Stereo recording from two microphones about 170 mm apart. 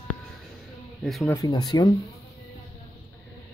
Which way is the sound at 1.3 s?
25° left (ahead or behind).